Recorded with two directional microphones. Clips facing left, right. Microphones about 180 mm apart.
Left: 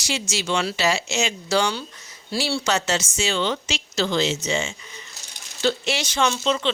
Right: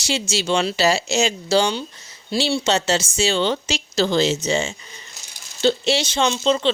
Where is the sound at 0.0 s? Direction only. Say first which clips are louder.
Right 4 dB; 30° right (ahead or behind).